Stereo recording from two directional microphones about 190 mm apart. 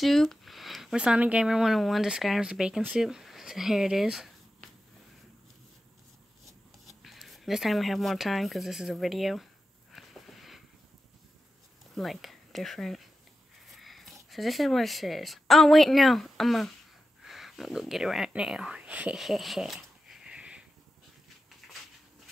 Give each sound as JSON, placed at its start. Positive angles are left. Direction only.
{"t": 0.0, "sound": "speech", "side_deg": 0}
{"t": 7.0, "sound": "speech", "side_deg": 0}
{"t": 9.9, "sound": "a sound", "side_deg": 0}
{"t": 11.9, "sound": "speech", "side_deg": 0}